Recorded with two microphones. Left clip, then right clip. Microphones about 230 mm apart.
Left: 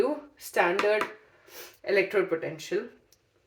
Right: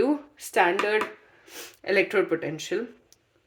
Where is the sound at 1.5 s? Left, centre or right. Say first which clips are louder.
Right 2 dB; right.